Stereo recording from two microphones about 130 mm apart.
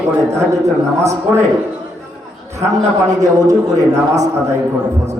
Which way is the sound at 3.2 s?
25° right (ahead or behind).